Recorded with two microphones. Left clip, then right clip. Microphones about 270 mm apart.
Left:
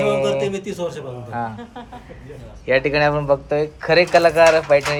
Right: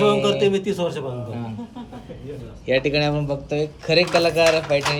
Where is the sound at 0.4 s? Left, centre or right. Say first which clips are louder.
Right 3 dB; centre.